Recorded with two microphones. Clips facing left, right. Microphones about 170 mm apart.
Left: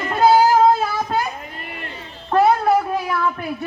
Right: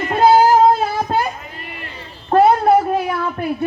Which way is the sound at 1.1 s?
30° right (ahead or behind).